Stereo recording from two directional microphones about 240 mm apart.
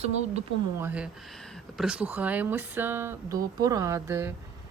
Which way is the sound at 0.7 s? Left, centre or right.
Centre.